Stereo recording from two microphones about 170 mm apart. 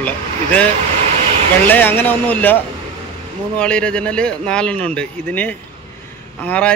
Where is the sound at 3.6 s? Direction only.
5° left (ahead or behind).